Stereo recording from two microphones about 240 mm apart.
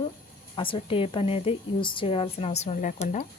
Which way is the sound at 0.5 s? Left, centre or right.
Left.